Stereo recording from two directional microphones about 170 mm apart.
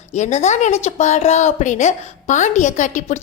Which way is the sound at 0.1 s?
40° left (ahead or behind).